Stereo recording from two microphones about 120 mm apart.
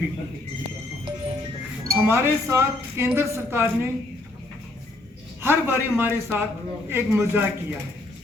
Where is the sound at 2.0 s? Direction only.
20° right (ahead or behind).